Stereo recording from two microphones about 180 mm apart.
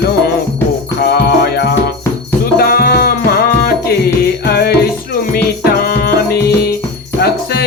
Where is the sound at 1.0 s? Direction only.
60° left (ahead or behind).